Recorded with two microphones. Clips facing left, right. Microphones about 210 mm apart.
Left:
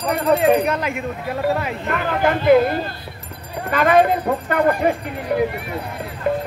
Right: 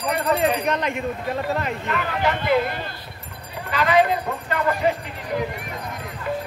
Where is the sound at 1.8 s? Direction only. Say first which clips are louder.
Left 6 dB; 50° left (ahead or behind).